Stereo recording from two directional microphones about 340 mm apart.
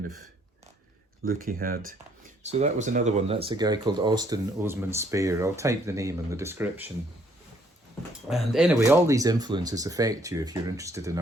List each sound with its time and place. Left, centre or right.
1.2 s speech: right; by 6.9 s centre
8.3 s speech: centre